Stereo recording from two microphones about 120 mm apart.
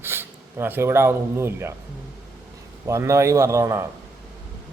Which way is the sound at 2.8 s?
25° right (ahead or behind).